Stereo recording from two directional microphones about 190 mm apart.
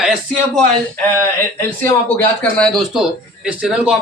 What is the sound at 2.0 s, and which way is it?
Speech, 5° left (ahead or behind).